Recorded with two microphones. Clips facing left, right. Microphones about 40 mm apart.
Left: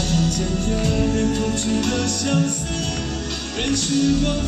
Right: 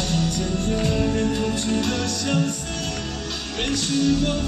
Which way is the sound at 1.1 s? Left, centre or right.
Centre.